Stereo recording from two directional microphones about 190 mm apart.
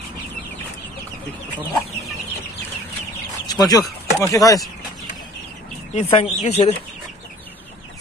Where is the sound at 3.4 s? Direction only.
20° left (ahead or behind).